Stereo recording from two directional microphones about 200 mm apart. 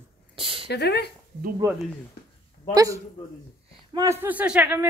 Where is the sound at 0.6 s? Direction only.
55° left (ahead or behind).